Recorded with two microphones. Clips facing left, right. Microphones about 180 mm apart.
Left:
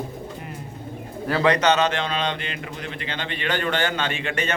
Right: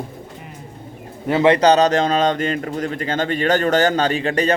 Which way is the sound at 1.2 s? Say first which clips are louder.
Right 6 dB; 25° right (ahead or behind).